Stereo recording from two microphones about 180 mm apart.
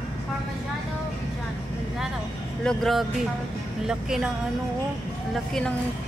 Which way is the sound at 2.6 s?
5° left (ahead or behind).